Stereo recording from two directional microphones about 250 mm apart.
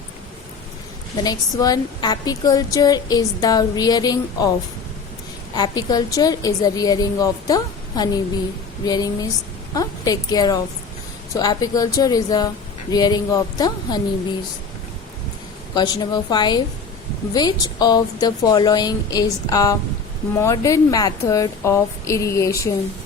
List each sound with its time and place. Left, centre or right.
1.1 s a woman's voice: centre
5.5 s a woman's voice: centre
9.7 s a woman's voice: centre
15.7 s a woman's voice: centre